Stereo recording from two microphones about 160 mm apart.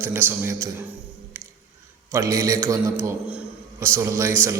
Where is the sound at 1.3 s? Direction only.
15° right (ahead or behind).